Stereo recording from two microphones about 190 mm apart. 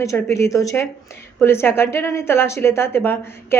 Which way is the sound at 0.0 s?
15° left (ahead or behind).